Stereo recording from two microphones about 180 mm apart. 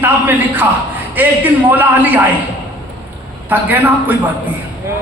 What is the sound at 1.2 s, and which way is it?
Speech, 10° right (ahead or behind).